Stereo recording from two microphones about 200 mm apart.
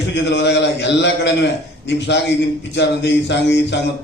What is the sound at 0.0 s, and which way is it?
A man's voice, 60° left (ahead or behind).